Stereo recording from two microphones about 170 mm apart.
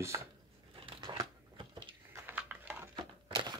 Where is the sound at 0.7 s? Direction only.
30° right (ahead or behind).